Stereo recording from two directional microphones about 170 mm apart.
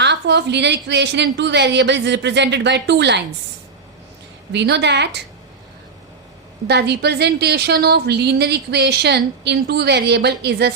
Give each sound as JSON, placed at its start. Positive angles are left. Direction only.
{"t": 0.0, "sound": "a woman's voice", "side_deg": -90}
{"t": 4.5, "sound": "a woman's voice", "side_deg": -90}
{"t": 6.7, "sound": "a woman's voice", "side_deg": -80}